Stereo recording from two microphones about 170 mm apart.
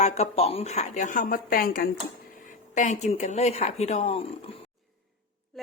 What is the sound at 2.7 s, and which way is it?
A woman's voice, 45° left (ahead or behind).